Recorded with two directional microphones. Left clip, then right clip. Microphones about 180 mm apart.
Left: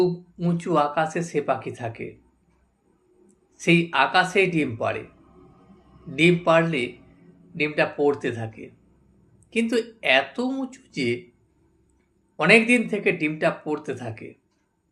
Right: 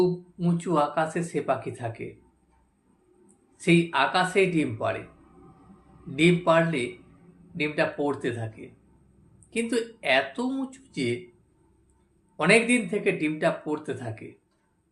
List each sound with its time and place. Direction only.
0.0 s speech: 30° left (ahead or behind)
3.6 s speech: 30° left (ahead or behind)
6.1 s speech: 30° left (ahead or behind)
12.4 s speech: 30° left (ahead or behind)